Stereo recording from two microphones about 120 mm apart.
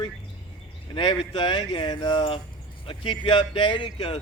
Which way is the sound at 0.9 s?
40° left (ahead or behind).